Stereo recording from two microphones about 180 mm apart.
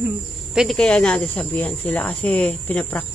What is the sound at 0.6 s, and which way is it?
Speech, 5° left (ahead or behind).